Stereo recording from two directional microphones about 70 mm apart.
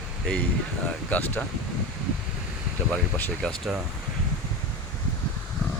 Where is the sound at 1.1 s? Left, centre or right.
Left.